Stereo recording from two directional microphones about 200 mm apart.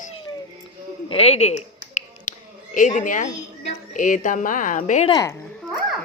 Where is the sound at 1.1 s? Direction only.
30° left (ahead or behind).